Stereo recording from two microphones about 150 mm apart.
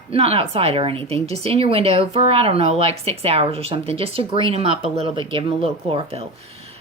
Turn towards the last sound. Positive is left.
turn(degrees=-40)  # may be behind; listen again after turning